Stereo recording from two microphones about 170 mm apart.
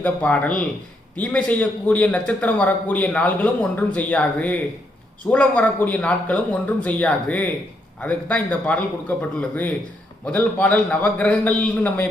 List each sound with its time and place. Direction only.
0.0 s a man's voice: 10° left (ahead or behind)